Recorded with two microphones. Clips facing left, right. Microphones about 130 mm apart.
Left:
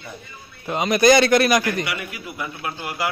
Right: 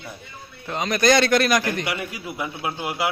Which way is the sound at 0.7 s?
10° left (ahead or behind).